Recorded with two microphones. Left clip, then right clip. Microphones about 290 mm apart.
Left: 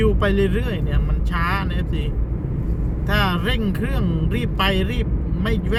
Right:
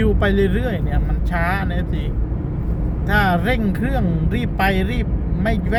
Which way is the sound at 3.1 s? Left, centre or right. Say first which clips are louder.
Right 4 dB; centre.